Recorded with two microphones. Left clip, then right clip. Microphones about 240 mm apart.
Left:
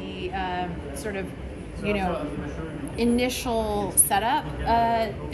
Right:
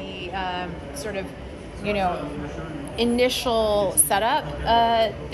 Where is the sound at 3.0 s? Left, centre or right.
Centre.